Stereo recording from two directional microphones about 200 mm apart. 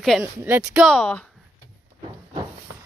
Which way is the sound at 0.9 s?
10° left (ahead or behind).